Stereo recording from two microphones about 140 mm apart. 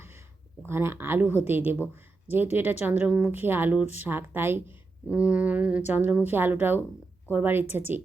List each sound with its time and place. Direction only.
0.6 s a woman's voice: 15° right (ahead or behind)